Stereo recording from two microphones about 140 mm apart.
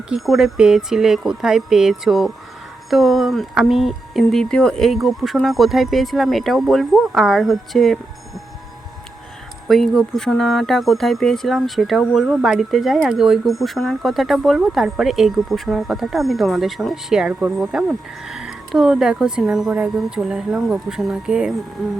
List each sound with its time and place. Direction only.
0.1 s speech: 5° right (ahead or behind)
9.6 s speech: centre (ahead or behind)